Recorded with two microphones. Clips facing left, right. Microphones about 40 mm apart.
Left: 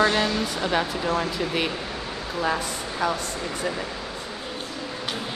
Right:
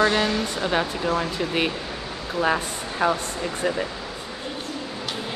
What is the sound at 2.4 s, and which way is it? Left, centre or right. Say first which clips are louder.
Speech: right 3 dB; right.